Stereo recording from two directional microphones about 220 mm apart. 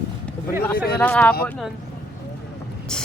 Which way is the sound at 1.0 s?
10° left (ahead or behind).